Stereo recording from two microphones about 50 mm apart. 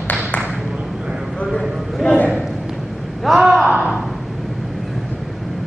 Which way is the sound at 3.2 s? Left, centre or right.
Centre.